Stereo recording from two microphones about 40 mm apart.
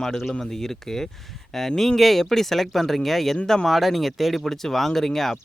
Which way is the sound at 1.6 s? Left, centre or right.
Centre.